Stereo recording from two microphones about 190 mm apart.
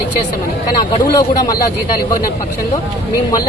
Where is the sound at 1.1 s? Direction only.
20° left (ahead or behind).